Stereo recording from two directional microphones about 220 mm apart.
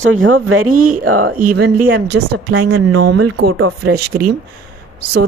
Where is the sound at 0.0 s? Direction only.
65° right (ahead or behind).